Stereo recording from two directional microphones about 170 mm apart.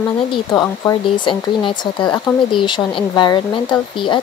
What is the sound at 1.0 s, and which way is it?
Speech, 30° left (ahead or behind).